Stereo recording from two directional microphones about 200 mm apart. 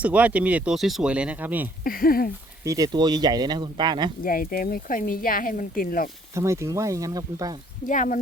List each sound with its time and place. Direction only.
0.0 s speech: 5° right (ahead or behind)
1.8 s speech: 45° left (ahead or behind)
2.6 s speech: 20° right (ahead or behind)
4.2 s speech: 45° left (ahead or behind)
6.3 s speech: 15° right (ahead or behind)
7.9 s speech: 40° left (ahead or behind)